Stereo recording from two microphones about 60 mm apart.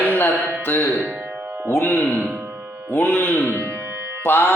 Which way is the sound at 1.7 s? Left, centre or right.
Left.